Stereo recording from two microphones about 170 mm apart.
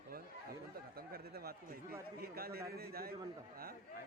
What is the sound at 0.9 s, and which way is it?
Speech, 65° right (ahead or behind).